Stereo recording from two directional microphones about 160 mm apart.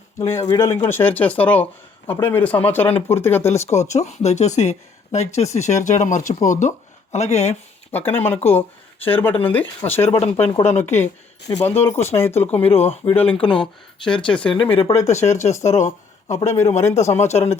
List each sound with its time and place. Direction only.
0.2 s speech: 15° left (ahead or behind)
3.7 s speech: 45° left (ahead or behind)
7.9 s speech: 10° left (ahead or behind)
8.4 s a sound: 10° left (ahead or behind)
9.4 s speech: 10° left (ahead or behind)
10.2 s speech: 40° left (ahead or behind)
10.7 s speech: 15° left (ahead or behind)
12.7 s speech: 40° left (ahead or behind)
13.1 s speech: 10° left (ahead or behind)
14.4 s speech: 30° left (ahead or behind)
14.9 s speech: 45° left (ahead or behind)